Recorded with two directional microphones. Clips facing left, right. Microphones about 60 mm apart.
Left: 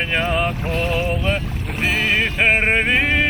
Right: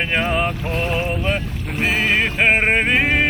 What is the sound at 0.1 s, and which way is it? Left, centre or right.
Music, right.